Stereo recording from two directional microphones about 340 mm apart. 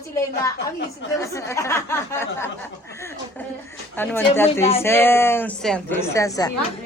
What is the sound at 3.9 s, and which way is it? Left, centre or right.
A woman's voice, centre.